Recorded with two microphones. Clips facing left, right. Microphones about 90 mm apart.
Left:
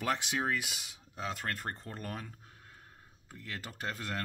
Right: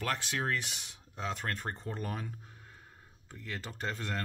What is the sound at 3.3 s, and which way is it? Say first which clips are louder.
Speech: right 2 dB; centre (ahead or behind).